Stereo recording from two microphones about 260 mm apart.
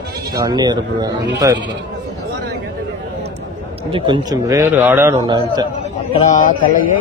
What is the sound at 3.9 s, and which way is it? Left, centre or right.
A man's voice, centre.